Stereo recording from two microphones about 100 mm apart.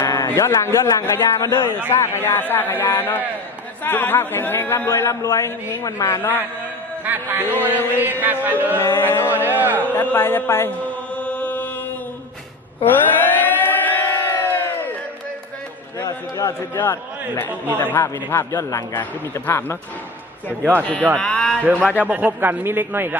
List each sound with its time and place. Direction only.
0.0 s a man's voice: 35° left (ahead or behind)
7.0 s speech: 20° right (ahead or behind)
8.8 s a man's voice: 20° left (ahead or behind)
9.3 s speech: 20° right (ahead or behind)
9.8 s chant: 20° left (ahead or behind)
12.8 s a sound: 20° left (ahead or behind)
16.0 s a man's voice: 35° left (ahead or behind)
21.2 s a man's voice: 10° left (ahead or behind)
21.6 s a man's voice: 15° right (ahead or behind)